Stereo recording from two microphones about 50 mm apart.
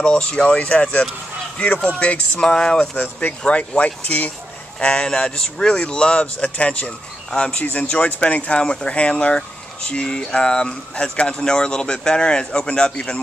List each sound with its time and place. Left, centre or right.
0.0 s speech: left
3.0 s speech: left